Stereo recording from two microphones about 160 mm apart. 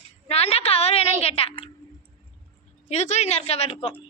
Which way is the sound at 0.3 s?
40° left (ahead or behind).